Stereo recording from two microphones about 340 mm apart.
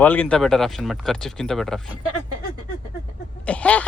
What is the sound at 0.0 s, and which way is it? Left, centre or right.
Speech, centre.